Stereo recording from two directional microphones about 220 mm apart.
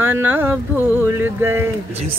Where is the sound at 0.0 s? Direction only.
10° right (ahead or behind).